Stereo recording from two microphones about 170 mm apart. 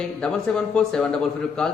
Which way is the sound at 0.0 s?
5° left (ahead or behind).